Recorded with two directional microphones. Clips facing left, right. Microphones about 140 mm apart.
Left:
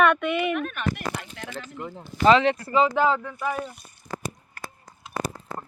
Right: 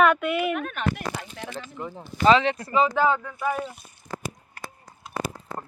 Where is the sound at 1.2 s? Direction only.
40° right (ahead or behind).